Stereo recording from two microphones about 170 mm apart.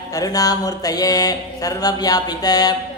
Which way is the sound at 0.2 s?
20° left (ahead or behind).